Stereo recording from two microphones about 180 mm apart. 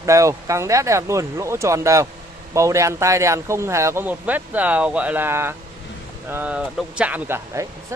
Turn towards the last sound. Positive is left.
turn(degrees=-10)  # may be behind; listen again after turning